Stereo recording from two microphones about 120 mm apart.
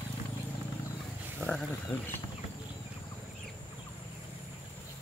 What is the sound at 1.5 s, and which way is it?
Wild animals, 10° left (ahead or behind).